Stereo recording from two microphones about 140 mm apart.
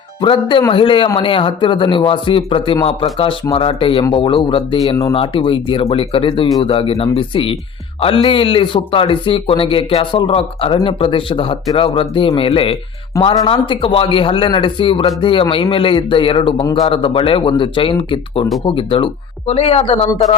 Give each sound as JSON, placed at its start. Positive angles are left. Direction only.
{"t": 0.2, "sound": "a man's voice", "side_deg": 35}
{"t": 13.2, "sound": "speech", "side_deg": 25}
{"t": 13.5, "sound": "a man's voice", "side_deg": 40}